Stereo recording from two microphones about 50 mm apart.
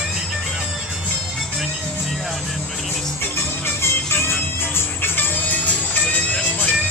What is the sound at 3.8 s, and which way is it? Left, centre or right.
Music, left.